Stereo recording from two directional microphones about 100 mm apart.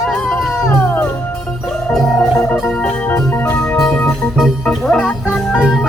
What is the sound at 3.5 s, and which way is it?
Music, 15° left (ahead or behind).